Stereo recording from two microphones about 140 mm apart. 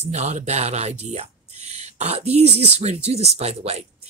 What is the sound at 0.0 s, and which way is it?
Speech, 55° right (ahead or behind).